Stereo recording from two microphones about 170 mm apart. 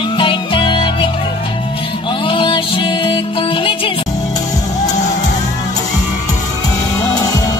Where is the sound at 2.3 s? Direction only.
30° left (ahead or behind).